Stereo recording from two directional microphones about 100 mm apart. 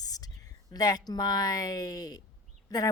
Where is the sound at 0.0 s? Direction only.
40° left (ahead or behind).